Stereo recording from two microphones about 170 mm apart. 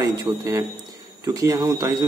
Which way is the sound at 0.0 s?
20° right (ahead or behind).